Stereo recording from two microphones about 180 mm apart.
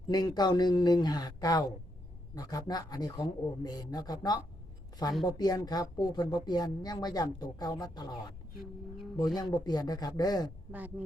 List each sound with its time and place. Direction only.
0.1 s speech: 20° left (ahead or behind)
9.1 s speech: 20° left (ahead or behind)
10.7 s speech: 10° right (ahead or behind)